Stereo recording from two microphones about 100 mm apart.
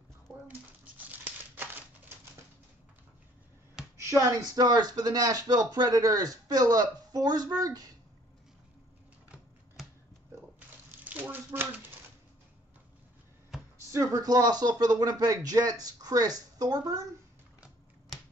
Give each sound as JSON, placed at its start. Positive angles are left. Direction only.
{"t": 0.5, "sound": "crumpling", "side_deg": -15}
{"t": 4.0, "sound": "speech", "side_deg": -30}
{"t": 10.9, "sound": "typewriter", "side_deg": -20}
{"t": 13.9, "sound": "speech", "side_deg": -40}